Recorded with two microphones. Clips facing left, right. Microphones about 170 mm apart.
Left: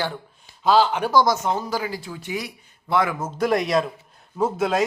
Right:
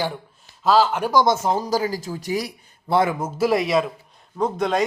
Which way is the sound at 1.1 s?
25° right (ahead or behind).